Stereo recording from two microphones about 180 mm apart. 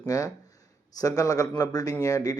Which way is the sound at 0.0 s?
20° left (ahead or behind).